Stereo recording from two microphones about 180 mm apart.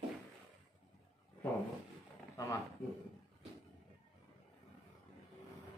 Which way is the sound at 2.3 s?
15° left (ahead or behind).